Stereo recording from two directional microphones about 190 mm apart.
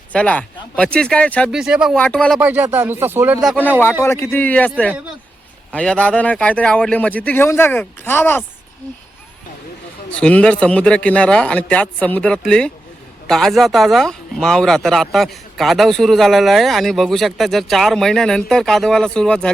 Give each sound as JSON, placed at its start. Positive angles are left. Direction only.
{"t": 0.1, "sound": "speech", "side_deg": 5}
{"t": 2.4, "sound": "speech", "side_deg": -10}
{"t": 3.5, "sound": "speech", "side_deg": 10}
{"t": 5.7, "sound": "speech", "side_deg": 5}
{"t": 10.1, "sound": "speech", "side_deg": 5}